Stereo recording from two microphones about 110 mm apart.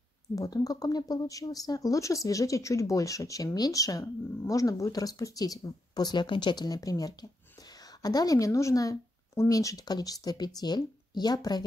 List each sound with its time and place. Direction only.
0.4 s speech: 35° left (ahead or behind)